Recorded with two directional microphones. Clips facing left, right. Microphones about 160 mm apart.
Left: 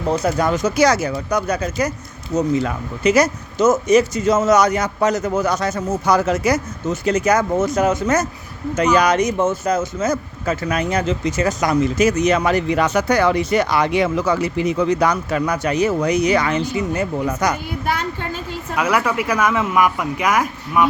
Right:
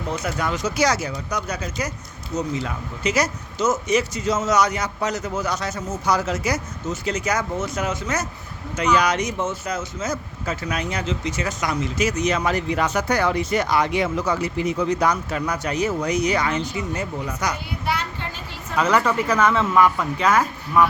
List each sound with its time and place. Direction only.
0.1 s speech: 40° left (ahead or behind)
18.8 s speech: 10° left (ahead or behind)